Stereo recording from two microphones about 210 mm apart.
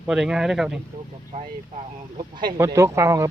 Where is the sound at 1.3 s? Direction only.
25° right (ahead or behind).